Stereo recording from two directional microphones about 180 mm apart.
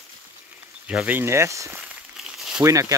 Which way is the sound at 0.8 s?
10° right (ahead or behind).